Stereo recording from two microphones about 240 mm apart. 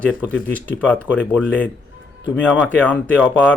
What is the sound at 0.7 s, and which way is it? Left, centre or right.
Speech, centre.